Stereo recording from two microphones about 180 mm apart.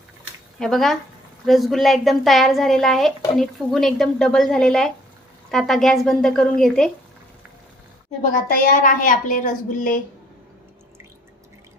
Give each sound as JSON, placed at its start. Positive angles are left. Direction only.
{"t": 0.6, "sound": "a woman's voice", "side_deg": 0}
{"t": 8.3, "sound": "a woman's voice", "side_deg": 50}